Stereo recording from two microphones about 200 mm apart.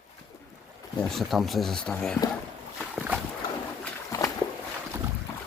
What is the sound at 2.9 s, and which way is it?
Boat, 5° right (ahead or behind).